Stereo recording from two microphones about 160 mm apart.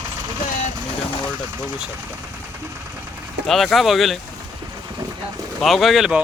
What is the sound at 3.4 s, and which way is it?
Speech, centre (ahead or behind).